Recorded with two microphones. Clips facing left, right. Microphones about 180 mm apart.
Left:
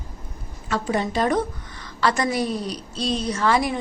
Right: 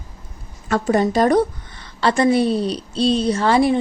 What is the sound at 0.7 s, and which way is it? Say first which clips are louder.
A woman's voice: right 6 dB; 45° right (ahead or behind).